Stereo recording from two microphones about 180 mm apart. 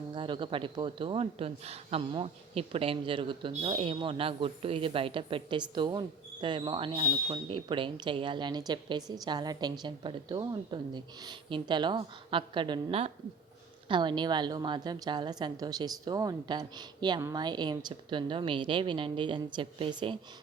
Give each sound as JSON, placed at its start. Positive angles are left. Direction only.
{"t": 0.1, "sound": "a man's voice", "side_deg": -30}